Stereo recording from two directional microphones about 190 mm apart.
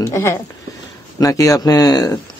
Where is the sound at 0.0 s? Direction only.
15° left (ahead or behind).